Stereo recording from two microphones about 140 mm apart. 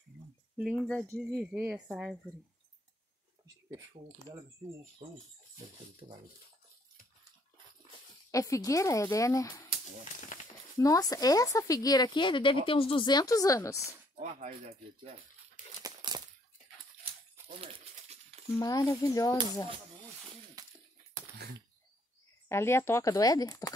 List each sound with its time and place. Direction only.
0.6 s speech: 5° right (ahead or behind)
4.3 s speech: 20° left (ahead or behind)
5.0 s speech: 50° right (ahead or behind)
8.3 s speech: 25° left (ahead or behind)
10.8 s speech: 25° left (ahead or behind)
14.1 s speech: 50° right (ahead or behind)
15.8 s a sound: 30° right (ahead or behind)
17.5 s a sound: 45° right (ahead or behind)
18.6 s speech: 25° left (ahead or behind)
20.6 s a sound: 25° right (ahead or behind)
22.5 s speech: 20° left (ahead or behind)